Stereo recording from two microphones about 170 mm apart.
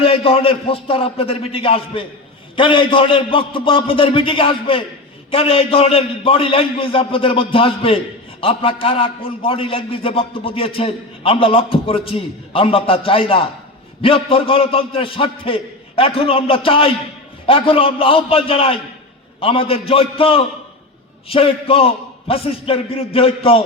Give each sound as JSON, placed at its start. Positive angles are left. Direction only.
{"t": 0.0, "sound": "a man's voice", "side_deg": 35}